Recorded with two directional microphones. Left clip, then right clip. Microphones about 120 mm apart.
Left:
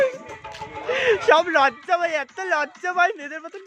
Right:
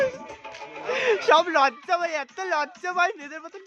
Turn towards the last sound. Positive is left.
turn(degrees=20)  # may be behind; listen again after turning